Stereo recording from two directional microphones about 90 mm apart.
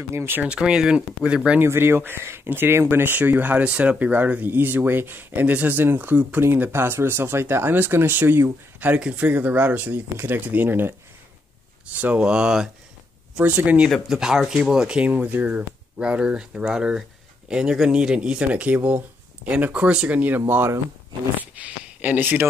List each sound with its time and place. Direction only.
0.1 s speech: 25° right (ahead or behind)
0.4 s speech: 10° right (ahead or behind)
1.6 s speech: 25° right (ahead or behind)
12.0 s speech: 15° right (ahead or behind)
13.8 s speech: centre (ahead or behind); by 22.5 s 20° right (ahead or behind)